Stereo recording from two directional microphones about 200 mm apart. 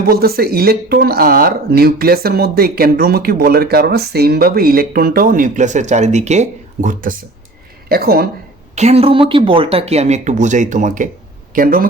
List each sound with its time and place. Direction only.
0.1 s speech: 50° right (ahead or behind)
8.7 s speech: 35° right (ahead or behind)